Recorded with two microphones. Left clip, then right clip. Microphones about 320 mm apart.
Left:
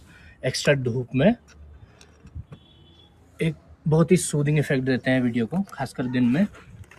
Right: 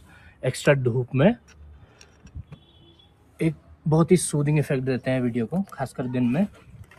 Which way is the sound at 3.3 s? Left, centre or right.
Centre.